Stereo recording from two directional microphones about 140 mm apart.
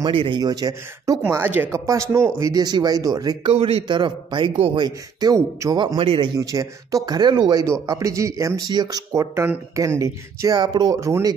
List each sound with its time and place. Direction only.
0.0 s a man's voice: 35° right (ahead or behind)
1.2 s speech: 15° right (ahead or behind)
3.5 s a man's voice: 40° right (ahead or behind); by 5.9 s 25° right (ahead or behind)
5.9 s speech: 40° right (ahead or behind); by 11.3 s 20° right (ahead or behind)